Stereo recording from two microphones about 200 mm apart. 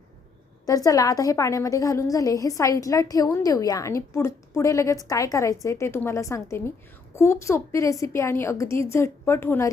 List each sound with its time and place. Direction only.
0.7 s a woman's voice: 15° left (ahead or behind)